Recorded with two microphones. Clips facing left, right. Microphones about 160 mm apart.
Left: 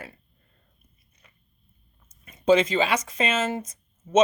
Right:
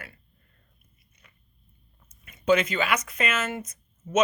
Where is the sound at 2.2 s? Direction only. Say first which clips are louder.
Left 3 dB; 30° left (ahead or behind).